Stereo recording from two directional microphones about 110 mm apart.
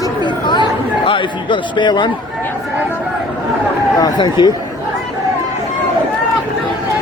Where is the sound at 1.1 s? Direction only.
50° left (ahead or behind).